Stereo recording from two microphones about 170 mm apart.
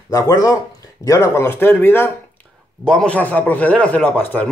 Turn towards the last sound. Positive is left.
turn(degrees=10)  # may be behind; listen again after turning